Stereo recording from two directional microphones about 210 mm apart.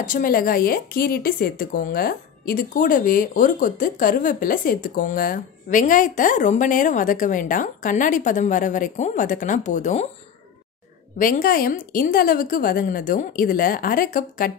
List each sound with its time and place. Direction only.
0.0 s speech: 40° left (ahead or behind)
11.1 s a woman's voice: 40° left (ahead or behind)